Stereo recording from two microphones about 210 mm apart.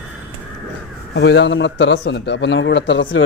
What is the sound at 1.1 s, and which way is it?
Speech, 55° left (ahead or behind).